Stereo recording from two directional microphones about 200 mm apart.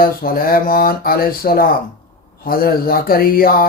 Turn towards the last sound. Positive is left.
turn(degrees=45)  # may be behind; listen again after turning